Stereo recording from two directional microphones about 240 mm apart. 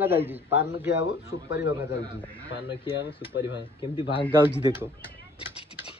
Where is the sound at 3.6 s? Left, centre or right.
Left.